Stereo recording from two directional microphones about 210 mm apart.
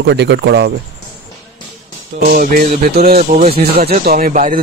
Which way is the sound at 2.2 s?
40° right (ahead or behind).